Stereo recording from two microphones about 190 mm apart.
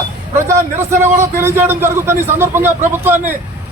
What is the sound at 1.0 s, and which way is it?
A man's voice, 10° right (ahead or behind).